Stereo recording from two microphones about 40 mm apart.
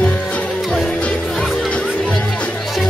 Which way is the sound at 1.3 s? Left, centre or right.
Centre.